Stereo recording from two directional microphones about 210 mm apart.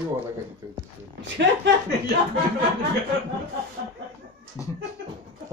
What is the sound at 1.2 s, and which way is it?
Speech, 55° right (ahead or behind).